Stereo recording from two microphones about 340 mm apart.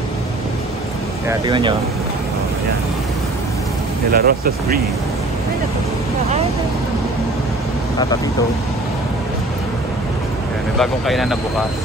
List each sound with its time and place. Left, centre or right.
1.4 s speech: centre
4.1 s speech: right
10.8 s speech: centre